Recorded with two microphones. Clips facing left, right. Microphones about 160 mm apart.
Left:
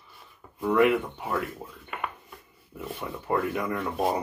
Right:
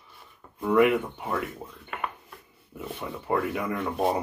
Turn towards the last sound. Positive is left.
turn(degrees=0)  # may be behind; listen again after turning